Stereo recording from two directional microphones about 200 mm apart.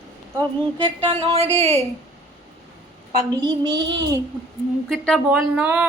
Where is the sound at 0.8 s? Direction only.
25° right (ahead or behind).